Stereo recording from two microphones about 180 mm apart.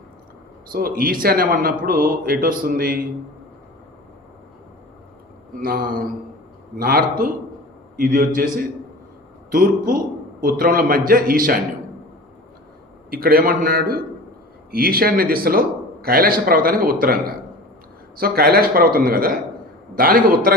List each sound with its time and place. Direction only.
0.7 s a man's voice: 55° right (ahead or behind)
5.6 s a man's voice: 50° right (ahead or behind)
9.5 s a man's voice: 55° right (ahead or behind)
13.1 s a man's voice: 55° right (ahead or behind)